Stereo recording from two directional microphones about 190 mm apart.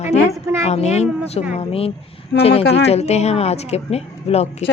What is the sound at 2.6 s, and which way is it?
Speech, 60° left (ahead or behind).